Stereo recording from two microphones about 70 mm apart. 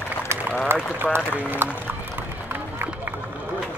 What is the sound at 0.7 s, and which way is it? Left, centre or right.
Speech, right.